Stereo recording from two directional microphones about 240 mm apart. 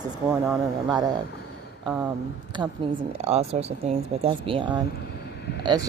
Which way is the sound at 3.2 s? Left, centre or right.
Right.